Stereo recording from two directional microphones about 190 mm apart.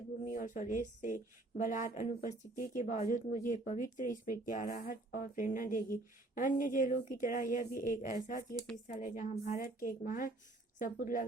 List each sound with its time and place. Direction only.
0.3 s speech: 45° left (ahead or behind)